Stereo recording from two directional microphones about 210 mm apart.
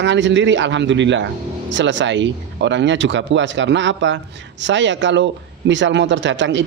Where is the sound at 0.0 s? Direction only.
60° right (ahead or behind).